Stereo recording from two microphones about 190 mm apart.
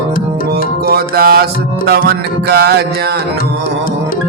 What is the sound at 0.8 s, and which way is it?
Music, 50° right (ahead or behind).